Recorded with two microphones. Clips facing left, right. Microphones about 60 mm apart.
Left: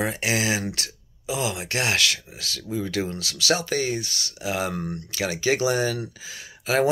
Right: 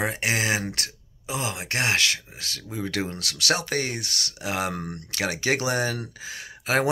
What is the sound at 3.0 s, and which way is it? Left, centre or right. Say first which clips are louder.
Speech: left 2 dB; right.